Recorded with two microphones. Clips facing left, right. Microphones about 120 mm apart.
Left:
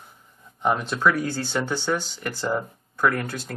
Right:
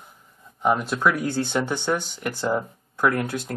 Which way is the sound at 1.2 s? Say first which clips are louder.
Right 2 dB; 20° right (ahead or behind).